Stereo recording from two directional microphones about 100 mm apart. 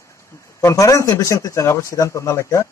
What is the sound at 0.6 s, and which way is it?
A man's voice, 30° left (ahead or behind).